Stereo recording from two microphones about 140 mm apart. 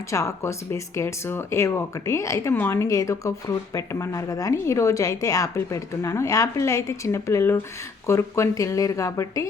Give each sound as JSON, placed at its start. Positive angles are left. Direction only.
{"t": 0.1, "sound": "speech", "side_deg": 20}